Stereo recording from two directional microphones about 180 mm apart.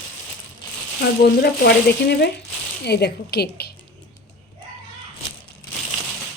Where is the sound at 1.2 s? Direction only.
60° left (ahead or behind).